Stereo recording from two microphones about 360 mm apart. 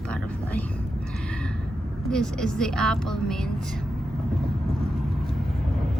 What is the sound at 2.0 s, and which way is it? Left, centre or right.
Speech, centre.